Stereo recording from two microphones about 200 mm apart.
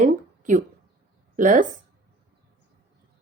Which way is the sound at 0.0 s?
40° right (ahead or behind).